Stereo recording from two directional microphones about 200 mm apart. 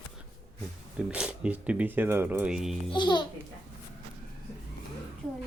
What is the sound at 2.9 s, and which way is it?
Speech, 25° left (ahead or behind).